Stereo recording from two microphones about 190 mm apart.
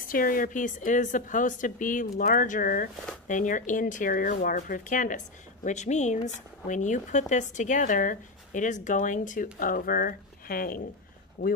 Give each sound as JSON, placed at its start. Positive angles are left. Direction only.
{"t": 0.1, "sound": "speech", "side_deg": 45}